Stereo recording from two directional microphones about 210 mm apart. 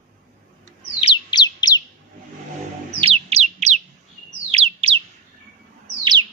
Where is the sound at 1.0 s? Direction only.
20° left (ahead or behind).